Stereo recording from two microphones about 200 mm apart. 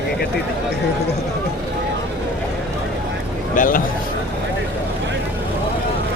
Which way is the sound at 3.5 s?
45° left (ahead or behind).